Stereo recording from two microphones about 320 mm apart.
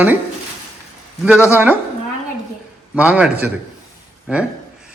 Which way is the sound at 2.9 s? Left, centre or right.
Centre.